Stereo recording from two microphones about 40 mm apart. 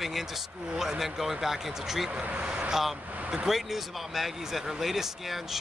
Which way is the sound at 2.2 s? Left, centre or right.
Right.